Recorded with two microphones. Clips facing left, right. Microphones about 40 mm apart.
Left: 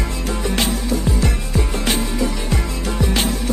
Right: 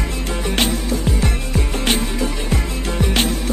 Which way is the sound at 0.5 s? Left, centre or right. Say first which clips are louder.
Right 2 dB; right.